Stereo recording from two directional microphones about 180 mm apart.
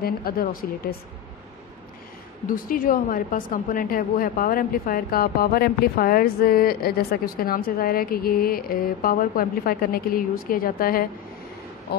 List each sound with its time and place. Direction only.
0.0 s a woman's voice: 55° left (ahead or behind)
2.4 s a woman's voice: 50° left (ahead or behind)